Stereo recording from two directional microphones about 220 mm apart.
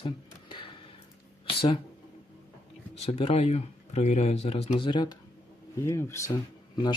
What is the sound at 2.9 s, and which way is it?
Speech, 25° left (ahead or behind).